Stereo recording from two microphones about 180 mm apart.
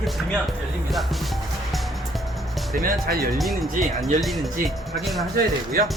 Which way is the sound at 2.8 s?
55° right (ahead or behind).